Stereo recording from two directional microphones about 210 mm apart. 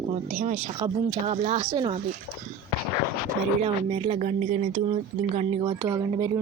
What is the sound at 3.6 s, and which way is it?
A woman's voice, 30° right (ahead or behind).